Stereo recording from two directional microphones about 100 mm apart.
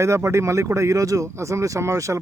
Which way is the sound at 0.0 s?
30° right (ahead or behind).